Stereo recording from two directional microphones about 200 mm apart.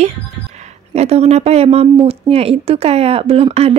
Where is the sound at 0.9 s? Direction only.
30° right (ahead or behind).